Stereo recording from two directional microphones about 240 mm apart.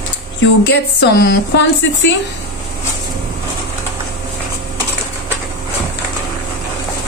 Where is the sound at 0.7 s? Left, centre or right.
Left.